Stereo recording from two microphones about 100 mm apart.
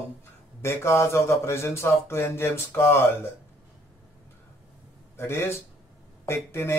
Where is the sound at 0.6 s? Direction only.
25° left (ahead or behind).